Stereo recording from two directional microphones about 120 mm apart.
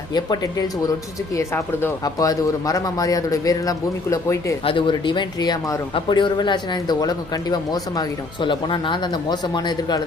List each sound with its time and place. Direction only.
0.1 s speech: 35° left (ahead or behind)
1.4 s a man's voice: 20° left (ahead or behind)
4.6 s speech: 45° left (ahead or behind)